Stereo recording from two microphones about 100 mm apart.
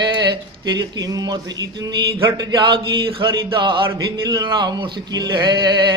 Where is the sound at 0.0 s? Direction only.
50° right (ahead or behind).